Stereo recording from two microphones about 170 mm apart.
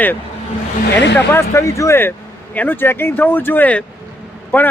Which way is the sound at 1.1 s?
15° left (ahead or behind).